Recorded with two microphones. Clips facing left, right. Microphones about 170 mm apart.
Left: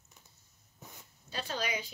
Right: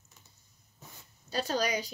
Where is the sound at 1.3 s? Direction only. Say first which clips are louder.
Right 6 dB; 40° right (ahead or behind).